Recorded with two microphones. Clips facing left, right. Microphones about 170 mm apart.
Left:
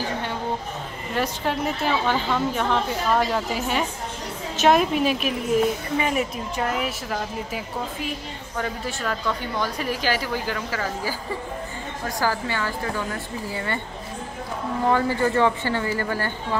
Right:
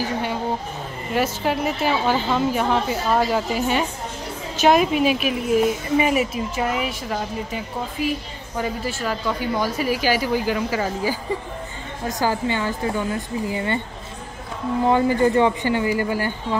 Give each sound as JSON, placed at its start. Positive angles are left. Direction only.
{"t": 1.1, "sound": "a woman's voice", "side_deg": -5}
{"t": 14.9, "sound": "a woman's voice", "side_deg": -20}